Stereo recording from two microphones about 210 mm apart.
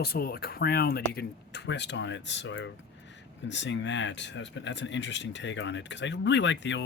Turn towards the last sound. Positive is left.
turn(degrees=60)  # may be behind; listen again after turning